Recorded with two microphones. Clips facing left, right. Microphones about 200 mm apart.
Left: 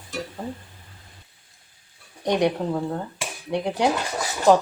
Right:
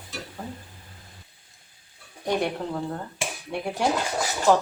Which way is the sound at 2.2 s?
20° left (ahead or behind).